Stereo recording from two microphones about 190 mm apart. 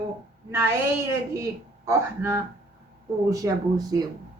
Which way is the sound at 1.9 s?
15° right (ahead or behind).